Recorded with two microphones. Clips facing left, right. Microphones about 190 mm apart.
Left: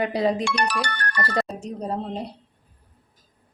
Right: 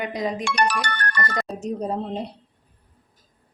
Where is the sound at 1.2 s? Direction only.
30° left (ahead or behind).